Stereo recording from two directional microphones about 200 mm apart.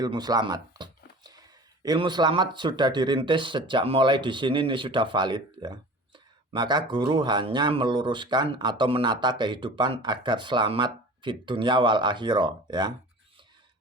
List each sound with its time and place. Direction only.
0.0 s speech: 20° right (ahead or behind)